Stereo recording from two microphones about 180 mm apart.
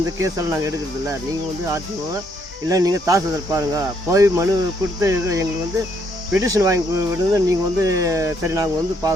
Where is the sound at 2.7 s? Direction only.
20° right (ahead or behind).